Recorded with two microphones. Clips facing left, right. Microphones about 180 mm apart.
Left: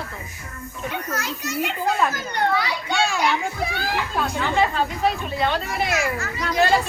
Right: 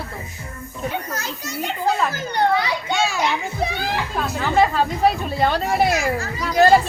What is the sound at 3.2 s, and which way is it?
Speech, 20° right (ahead or behind).